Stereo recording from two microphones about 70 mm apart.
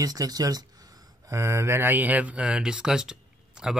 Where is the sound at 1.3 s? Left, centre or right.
Right.